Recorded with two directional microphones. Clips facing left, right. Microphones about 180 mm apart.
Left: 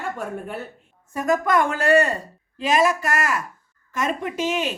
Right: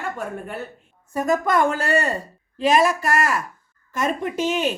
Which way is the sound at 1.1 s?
30° right (ahead or behind).